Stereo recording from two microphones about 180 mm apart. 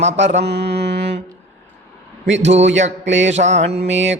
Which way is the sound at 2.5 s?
40° right (ahead or behind).